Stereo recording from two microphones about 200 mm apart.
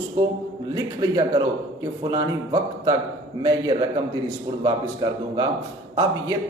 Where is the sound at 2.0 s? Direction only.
15° right (ahead or behind).